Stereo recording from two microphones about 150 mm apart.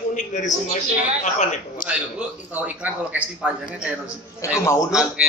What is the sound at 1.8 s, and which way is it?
Speech, 70° left (ahead or behind).